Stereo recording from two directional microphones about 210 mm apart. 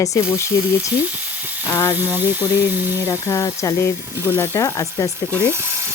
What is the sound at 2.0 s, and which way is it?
Speech, 10° right (ahead or behind).